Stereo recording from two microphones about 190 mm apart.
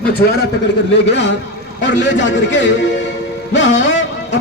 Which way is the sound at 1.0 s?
70° left (ahead or behind).